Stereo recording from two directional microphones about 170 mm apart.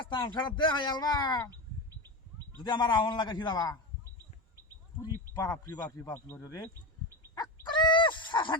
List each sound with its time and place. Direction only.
0.1 s speech: 25° left (ahead or behind)
2.6 s speech: 25° left (ahead or behind)
5.0 s speech: 20° left (ahead or behind)
7.3 s fowl: 25° left (ahead or behind)